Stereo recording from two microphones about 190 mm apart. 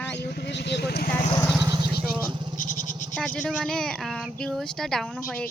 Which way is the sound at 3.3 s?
Centre (ahead or behind).